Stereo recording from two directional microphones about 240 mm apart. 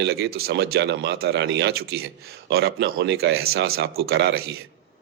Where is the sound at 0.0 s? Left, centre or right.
Right.